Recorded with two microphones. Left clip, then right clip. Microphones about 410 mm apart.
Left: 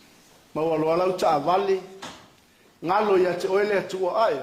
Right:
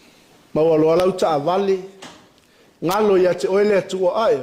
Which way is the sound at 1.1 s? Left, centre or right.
Right.